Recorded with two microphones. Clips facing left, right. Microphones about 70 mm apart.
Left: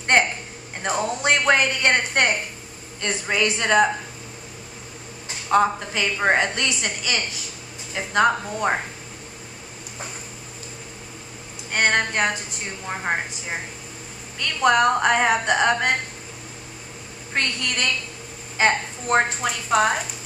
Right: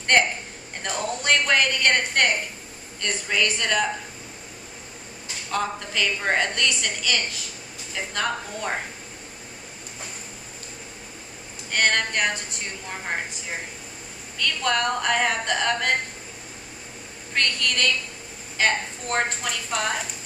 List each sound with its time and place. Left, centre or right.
0.8 s a woman's voice: left
5.5 s a woman's voice: left
11.7 s a woman's voice: left
17.3 s a woman's voice: left